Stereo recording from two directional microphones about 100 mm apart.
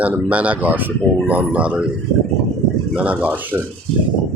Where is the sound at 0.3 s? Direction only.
15° right (ahead or behind).